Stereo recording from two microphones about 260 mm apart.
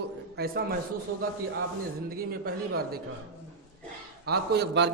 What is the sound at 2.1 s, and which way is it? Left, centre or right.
Speech, right.